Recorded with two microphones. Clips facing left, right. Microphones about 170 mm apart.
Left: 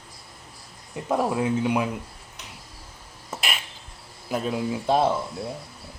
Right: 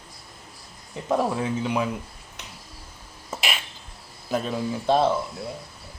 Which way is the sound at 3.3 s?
Centre (ahead or behind).